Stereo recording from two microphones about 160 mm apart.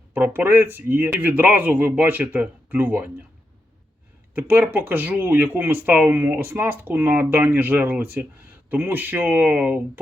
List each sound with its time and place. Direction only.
0.1 s speech: 10° right (ahead or behind)
4.4 s speech: 10° right (ahead or behind)